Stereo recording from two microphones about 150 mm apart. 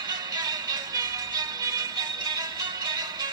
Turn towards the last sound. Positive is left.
turn(degrees=-25)  # may be behind; listen again after turning